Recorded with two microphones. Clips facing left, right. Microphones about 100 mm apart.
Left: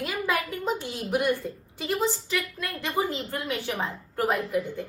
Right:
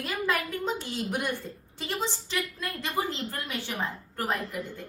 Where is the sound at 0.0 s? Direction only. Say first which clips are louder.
Left 1 dB; 10° left (ahead or behind).